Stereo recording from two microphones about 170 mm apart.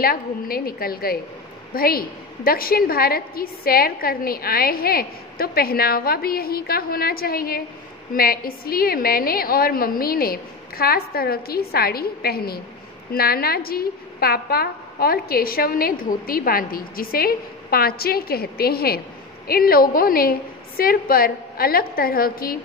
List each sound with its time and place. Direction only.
0.0 s a woman's voice: 60° left (ahead or behind)